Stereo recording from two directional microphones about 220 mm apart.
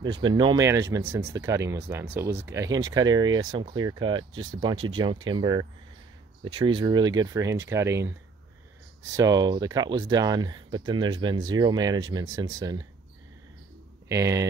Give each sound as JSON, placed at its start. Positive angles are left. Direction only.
{"t": 0.2, "sound": "speech", "side_deg": -20}
{"t": 9.1, "sound": "speech", "side_deg": -15}
{"t": 14.0, "sound": "speech", "side_deg": -15}